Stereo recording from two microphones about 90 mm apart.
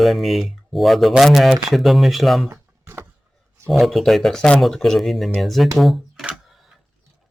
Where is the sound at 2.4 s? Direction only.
25° right (ahead or behind).